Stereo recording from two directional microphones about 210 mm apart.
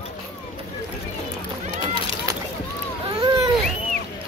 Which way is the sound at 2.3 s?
15° right (ahead or behind).